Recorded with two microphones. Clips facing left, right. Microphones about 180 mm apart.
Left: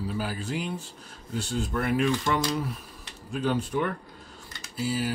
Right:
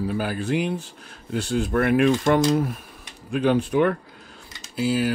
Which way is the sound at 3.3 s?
70° right (ahead or behind).